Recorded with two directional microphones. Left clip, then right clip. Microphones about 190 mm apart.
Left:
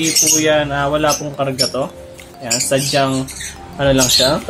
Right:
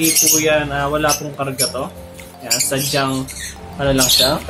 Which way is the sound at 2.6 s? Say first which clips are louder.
Left 6 dB; 25° left (ahead or behind).